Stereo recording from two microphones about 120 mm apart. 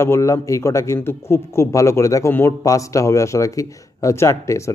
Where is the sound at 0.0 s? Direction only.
25° left (ahead or behind).